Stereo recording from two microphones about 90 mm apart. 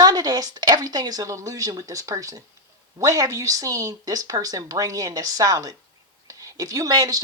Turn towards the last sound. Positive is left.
turn(degrees=-45)  # may be behind; listen again after turning